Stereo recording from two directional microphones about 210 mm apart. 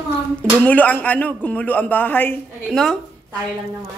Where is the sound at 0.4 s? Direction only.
5° left (ahead or behind).